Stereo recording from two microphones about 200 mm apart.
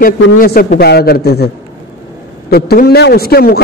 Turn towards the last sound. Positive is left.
turn(degrees=50)  # may be behind; listen again after turning